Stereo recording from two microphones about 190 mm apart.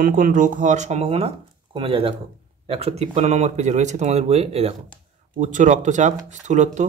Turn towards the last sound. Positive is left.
turn(degrees=-40)  # may be behind; listen again after turning